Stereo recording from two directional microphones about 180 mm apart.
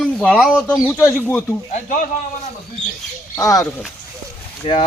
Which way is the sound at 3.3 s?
15° left (ahead or behind).